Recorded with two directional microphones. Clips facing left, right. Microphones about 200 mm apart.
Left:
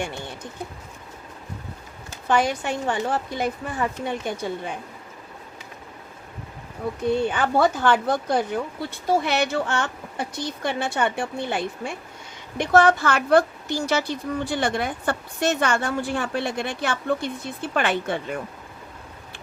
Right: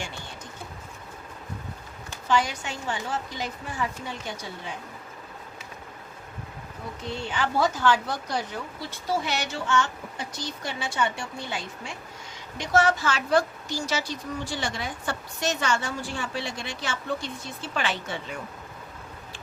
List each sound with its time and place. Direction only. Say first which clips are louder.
2.2 s a woman's voice: left 4 dB; 55° left (ahead or behind)
7.1 s a woman's voice: left 7 dB; 55° left (ahead or behind)